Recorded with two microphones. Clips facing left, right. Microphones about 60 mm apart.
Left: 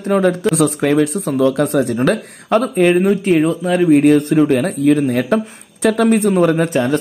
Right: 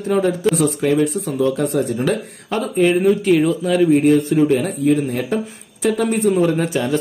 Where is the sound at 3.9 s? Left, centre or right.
Left.